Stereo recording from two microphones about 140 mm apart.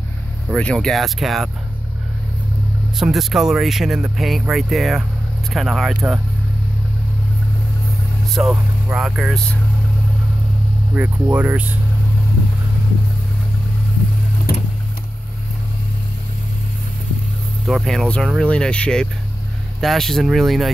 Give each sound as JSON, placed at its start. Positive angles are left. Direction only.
{"t": 0.6, "sound": "speech", "side_deg": 5}
{"t": 3.0, "sound": "speech", "side_deg": 0}
{"t": 8.4, "sound": "speech", "side_deg": -5}
{"t": 11.0, "sound": "speech", "side_deg": -10}
{"t": 14.5, "sound": "a sound", "side_deg": 90}
{"t": 17.6, "sound": "speech", "side_deg": 0}